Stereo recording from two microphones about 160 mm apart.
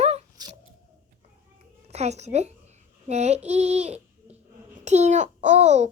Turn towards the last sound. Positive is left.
turn(degrees=-45)  # may be behind; listen again after turning